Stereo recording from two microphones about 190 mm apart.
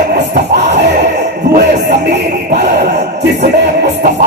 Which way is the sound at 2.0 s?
60° right (ahead or behind).